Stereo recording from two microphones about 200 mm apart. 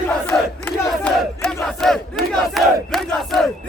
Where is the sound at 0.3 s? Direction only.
5° left (ahead or behind).